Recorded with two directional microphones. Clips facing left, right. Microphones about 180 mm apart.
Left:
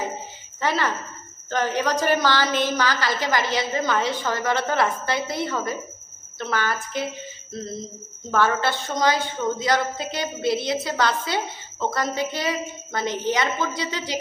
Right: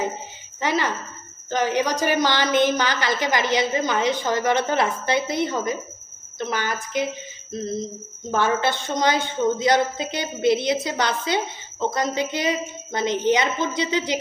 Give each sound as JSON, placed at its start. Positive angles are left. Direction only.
{"t": 0.6, "sound": "a woman's voice", "side_deg": -15}